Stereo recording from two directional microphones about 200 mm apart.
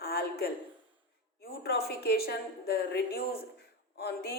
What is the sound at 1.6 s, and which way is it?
Speech, 50° left (ahead or behind).